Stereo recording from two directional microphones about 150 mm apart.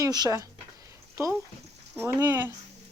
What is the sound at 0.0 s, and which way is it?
Speech, 25° right (ahead or behind).